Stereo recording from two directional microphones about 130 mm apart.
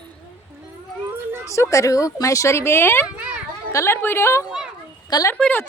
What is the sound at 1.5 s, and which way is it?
A woman's voice, 25° left (ahead or behind).